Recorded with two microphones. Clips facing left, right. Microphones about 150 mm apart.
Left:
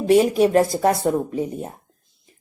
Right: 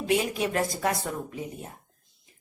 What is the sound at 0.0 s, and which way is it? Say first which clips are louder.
A woman's voice: left 11 dB; 40° left (ahead or behind).